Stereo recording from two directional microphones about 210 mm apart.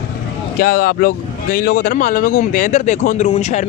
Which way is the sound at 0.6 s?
45° left (ahead or behind).